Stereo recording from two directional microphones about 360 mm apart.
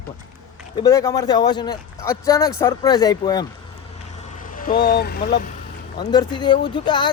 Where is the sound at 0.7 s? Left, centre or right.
Centre.